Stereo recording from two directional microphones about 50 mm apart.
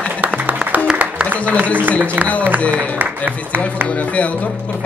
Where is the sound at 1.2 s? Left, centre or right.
Right.